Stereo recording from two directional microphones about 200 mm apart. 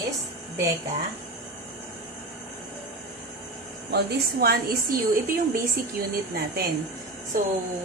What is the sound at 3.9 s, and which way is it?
A woman's voice, 50° right (ahead or behind).